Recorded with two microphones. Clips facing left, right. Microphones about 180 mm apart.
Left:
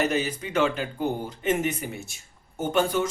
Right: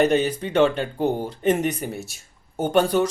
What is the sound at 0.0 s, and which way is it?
Speech, 35° right (ahead or behind).